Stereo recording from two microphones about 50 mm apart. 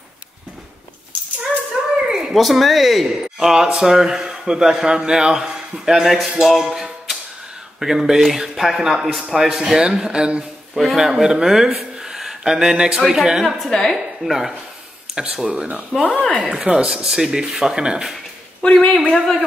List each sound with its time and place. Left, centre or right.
2.0 s a sound: centre
2.4 s speech: centre
3.3 s speech: centre
10.7 s speech: centre
13.7 s speech: centre
13.9 s speech: centre
15.4 s speech: centre
15.9 s speech: centre
16.4 s speech: centre
18.6 s speech: centre